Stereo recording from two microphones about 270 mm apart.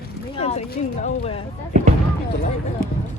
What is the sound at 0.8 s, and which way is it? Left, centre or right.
Speech, left.